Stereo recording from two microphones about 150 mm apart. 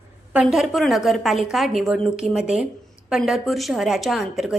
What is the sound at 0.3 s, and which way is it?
A woman's voice, centre (ahead or behind).